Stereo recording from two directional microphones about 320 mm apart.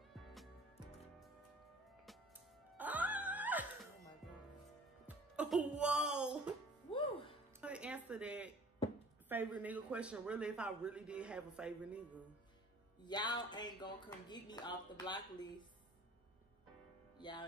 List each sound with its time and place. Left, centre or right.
2.8 s music: centre
6.9 s music: centre
7.6 s a sound: centre
9.3 s a man's voice: centre
13.0 s speech: centre
17.2 s speech: centre